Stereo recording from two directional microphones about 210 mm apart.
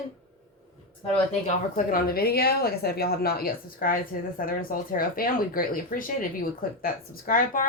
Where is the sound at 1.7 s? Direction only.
45° left (ahead or behind).